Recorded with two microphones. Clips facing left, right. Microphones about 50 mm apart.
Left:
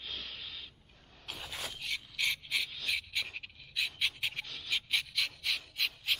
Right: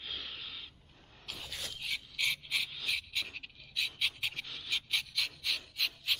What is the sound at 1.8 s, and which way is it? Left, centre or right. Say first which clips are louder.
Pant: right 1 dB; centre.